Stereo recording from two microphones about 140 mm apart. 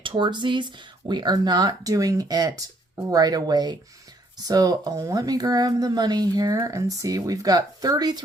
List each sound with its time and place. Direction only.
0.0 s speech: 35° right (ahead or behind)